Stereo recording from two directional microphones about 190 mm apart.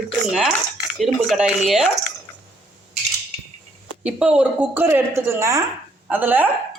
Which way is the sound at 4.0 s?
5° right (ahead or behind).